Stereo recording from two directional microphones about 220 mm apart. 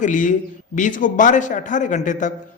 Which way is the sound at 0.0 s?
35° left (ahead or behind).